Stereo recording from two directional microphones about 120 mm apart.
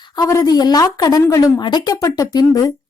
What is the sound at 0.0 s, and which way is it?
Speech, 30° left (ahead or behind).